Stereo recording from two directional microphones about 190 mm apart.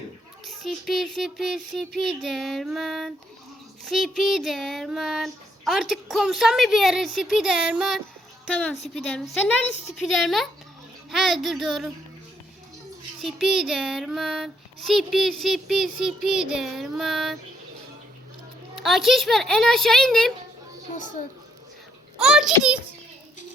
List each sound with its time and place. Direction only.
0.4 s child singing: centre (ahead or behind)
10.0 s child singing: centre (ahead or behind)
13.2 s child singing: 5° right (ahead or behind)
18.8 s child singing: centre (ahead or behind)
20.9 s a child's voice: 40° left (ahead or behind)
22.2 s child singing: 5° right (ahead or behind)